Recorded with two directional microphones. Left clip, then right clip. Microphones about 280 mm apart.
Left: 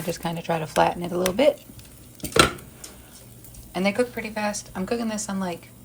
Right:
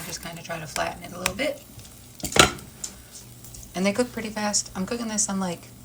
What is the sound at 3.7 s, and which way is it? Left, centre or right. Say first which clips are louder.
A woman's voice: left 1 dB; centre.